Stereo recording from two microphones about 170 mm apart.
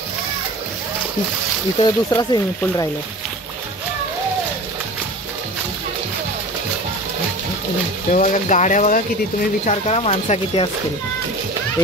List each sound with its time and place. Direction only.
1.8 s speech: 20° left (ahead or behind)
8.1 s speech: 45° left (ahead or behind)